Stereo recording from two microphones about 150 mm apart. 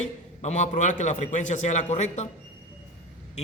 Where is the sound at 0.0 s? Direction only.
50° left (ahead or behind).